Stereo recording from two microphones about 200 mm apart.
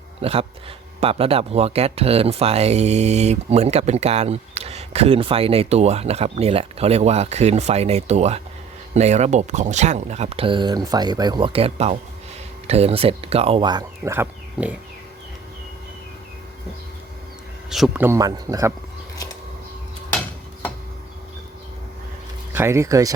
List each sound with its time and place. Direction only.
0.2 s speech: 30° right (ahead or behind); by 14.8 s 10° right (ahead or behind)
17.7 s speech: centre (ahead or behind)
20.1 s a sound: 5° left (ahead or behind)
22.5 s speech: 15° right (ahead or behind)